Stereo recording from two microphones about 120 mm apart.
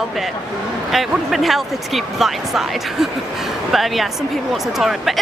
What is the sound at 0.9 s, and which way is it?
Speech, centre (ahead or behind).